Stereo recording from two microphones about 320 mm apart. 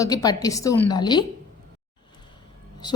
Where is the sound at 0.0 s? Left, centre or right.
Centre.